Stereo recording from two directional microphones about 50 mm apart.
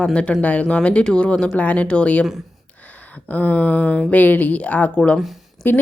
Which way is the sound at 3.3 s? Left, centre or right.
Left.